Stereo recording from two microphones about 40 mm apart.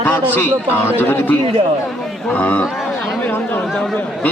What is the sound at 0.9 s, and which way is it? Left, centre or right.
Speech, left.